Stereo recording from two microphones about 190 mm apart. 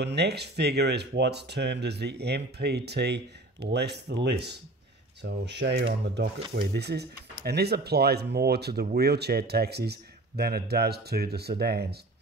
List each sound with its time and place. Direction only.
0.0 s speech: 60° right (ahead or behind)